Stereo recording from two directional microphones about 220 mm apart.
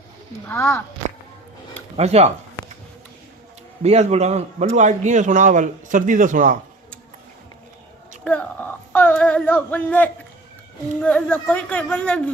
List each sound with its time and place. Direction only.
0.4 s speech: 10° left (ahead or behind)
2.0 s speech: 30° right (ahead or behind)
3.8 s a man's voice: 30° right (ahead or behind)
8.2 s a sound: 5° left (ahead or behind)
11.0 s speech: 5° left (ahead or behind)